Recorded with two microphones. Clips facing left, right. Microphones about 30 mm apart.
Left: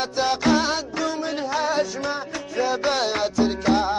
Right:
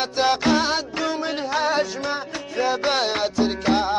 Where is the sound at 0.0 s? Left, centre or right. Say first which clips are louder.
Right 2 dB; right.